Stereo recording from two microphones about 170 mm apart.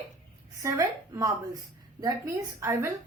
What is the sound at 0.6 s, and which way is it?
A woman's voice, 20° right (ahead or behind).